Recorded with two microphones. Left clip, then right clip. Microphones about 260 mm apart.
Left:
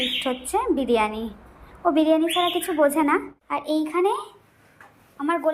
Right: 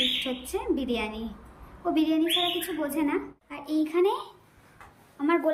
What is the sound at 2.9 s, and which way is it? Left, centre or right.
Speech, left.